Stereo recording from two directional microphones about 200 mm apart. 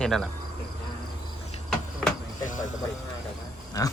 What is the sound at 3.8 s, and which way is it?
Pig, 15° left (ahead or behind).